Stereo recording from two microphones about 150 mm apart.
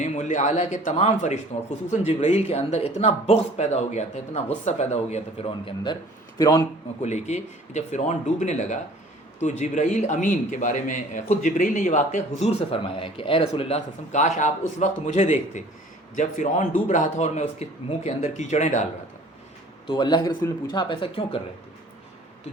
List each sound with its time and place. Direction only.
0.0 s a man's voice: 55° left (ahead or behind); by 6.0 s 35° left (ahead or behind)
7.0 s a man's voice: 50° left (ahead or behind)
19.9 s speech: 30° left (ahead or behind)